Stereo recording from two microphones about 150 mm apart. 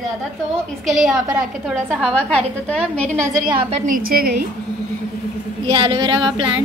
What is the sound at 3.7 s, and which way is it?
Speech, 65° right (ahead or behind).